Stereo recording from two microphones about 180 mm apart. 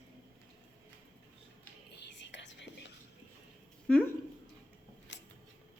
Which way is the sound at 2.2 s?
80° left.